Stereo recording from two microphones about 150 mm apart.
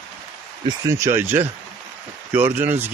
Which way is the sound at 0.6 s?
20° right (ahead or behind).